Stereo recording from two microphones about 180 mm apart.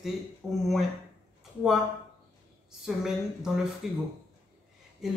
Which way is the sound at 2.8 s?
Centre (ahead or behind).